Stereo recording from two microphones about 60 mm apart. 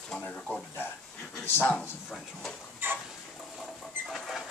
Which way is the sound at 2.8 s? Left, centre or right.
Right.